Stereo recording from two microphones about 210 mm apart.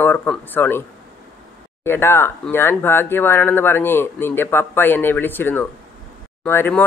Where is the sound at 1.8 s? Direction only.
10° left (ahead or behind).